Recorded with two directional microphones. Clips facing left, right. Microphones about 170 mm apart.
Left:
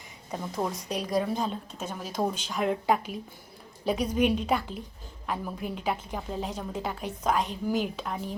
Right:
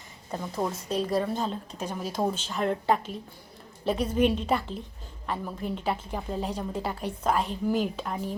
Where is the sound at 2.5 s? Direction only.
5° left (ahead or behind).